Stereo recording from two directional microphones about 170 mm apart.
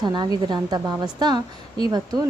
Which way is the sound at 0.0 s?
25° right (ahead or behind).